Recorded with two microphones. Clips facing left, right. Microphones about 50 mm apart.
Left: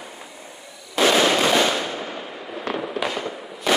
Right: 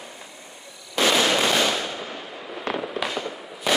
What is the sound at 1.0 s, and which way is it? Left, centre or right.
Fireworks, centre.